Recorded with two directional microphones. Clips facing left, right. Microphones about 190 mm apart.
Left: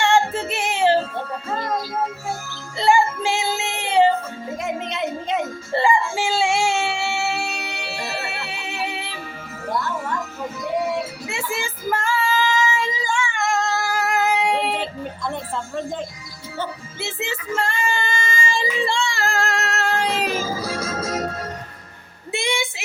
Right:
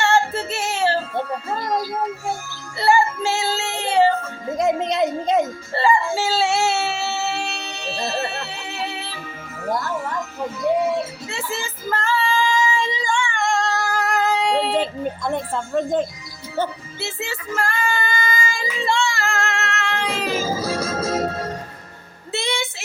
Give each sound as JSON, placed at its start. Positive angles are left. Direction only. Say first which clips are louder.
{"t": 0.0, "sound": "music", "louder": "left 1 dB", "side_deg": 15}
{"t": 2.7, "sound": "music", "louder": "even", "side_deg": 15}
{"t": 4.5, "sound": "a sound", "louder": "right 8 dB", "side_deg": -35}
{"t": 5.7, "sound": "a sound", "louder": "even", "side_deg": 15}
{"t": 11.3, "sound": "female singing", "louder": "left 1 dB", "side_deg": 10}
{"t": 15.9, "sound": "speech", "louder": "right 8 dB", "side_deg": -50}
{"t": 17.0, "sound": "child singing", "louder": "left 1 dB", "side_deg": 20}
{"t": 20.2, "sound": "music", "louder": "right 2 dB", "side_deg": -25}
{"t": 22.3, "sound": "a sound", "louder": "left 1 dB", "side_deg": 15}